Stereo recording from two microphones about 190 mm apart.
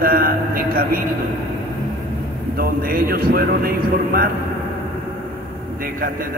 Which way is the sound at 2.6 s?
50° right (ahead or behind).